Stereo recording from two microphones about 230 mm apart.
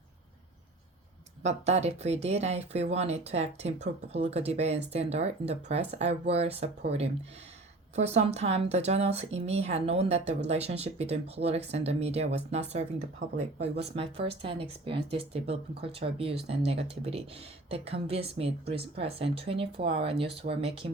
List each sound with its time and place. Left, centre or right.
1.4 s speech: right
13.8 s speech: right